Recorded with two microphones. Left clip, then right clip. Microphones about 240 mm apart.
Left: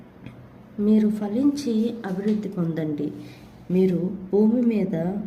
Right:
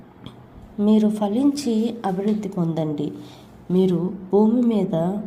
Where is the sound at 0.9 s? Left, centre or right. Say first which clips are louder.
Right 3 dB; centre.